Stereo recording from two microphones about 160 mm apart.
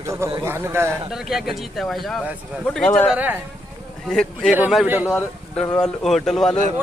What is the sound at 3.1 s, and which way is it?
Speech, 10° right (ahead or behind).